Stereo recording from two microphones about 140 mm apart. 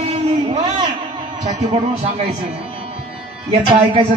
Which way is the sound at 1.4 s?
50° right (ahead or behind).